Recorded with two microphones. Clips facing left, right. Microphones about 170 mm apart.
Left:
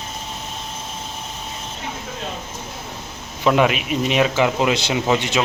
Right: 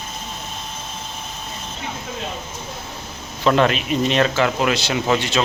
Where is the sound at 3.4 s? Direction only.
10° left (ahead or behind).